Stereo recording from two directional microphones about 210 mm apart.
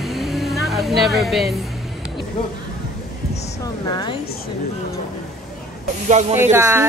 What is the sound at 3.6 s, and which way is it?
Speech, 20° left (ahead or behind).